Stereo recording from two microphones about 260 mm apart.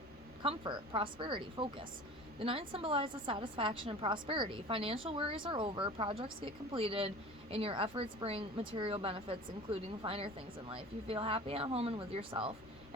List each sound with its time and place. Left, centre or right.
0.4 s a woman's voice: centre